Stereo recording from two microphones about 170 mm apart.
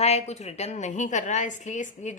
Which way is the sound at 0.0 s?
40° left (ahead or behind).